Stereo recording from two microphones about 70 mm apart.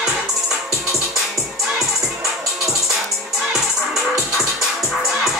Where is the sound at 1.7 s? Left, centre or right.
Centre.